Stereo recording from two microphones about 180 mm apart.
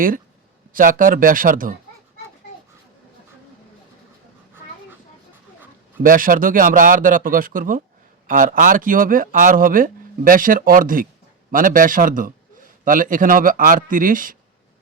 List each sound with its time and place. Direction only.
0.7 s speech: 50° right (ahead or behind)
6.0 s speech: 50° right (ahead or behind)